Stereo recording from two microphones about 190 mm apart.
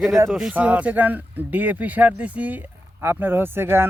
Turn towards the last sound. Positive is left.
turn(degrees=-10)  # may be behind; listen again after turning